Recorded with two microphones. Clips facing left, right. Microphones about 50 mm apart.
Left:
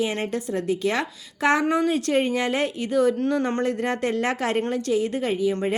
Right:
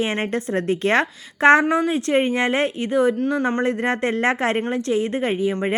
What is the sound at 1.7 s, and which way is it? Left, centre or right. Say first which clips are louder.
Speech: right 2 dB; right.